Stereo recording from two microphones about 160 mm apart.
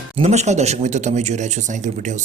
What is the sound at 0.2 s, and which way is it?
Speech, 45° right (ahead or behind).